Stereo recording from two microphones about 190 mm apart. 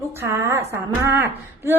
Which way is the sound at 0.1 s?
15° right (ahead or behind).